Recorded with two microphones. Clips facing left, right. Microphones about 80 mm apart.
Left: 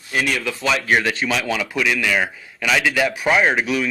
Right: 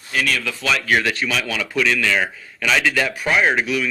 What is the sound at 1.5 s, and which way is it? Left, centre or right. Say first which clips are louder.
A man's voice: even; centre.